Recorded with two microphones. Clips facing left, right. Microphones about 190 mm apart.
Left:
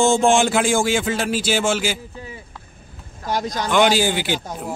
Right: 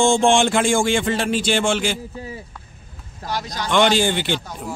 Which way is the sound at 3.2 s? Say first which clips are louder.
Left 4 dB; 45° left (ahead or behind).